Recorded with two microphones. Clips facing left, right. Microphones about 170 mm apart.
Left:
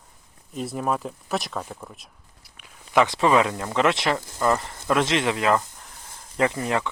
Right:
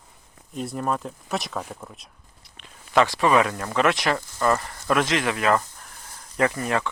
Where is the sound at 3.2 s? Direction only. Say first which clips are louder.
Even; 20° left (ahead or behind).